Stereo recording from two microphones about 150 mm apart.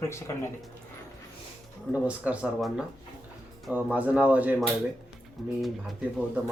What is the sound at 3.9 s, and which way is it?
Speech, 10° right (ahead or behind).